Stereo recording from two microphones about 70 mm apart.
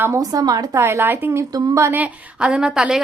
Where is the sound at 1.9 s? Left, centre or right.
Right.